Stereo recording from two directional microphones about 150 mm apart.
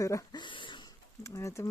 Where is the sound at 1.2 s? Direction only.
20° left (ahead or behind).